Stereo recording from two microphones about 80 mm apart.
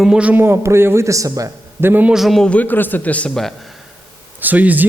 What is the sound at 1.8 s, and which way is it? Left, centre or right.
Speech, right.